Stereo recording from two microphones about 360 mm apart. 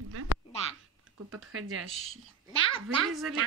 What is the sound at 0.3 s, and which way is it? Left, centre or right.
Quack, left.